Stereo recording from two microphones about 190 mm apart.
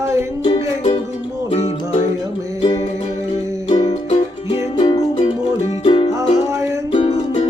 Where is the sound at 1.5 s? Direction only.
35° left (ahead or behind).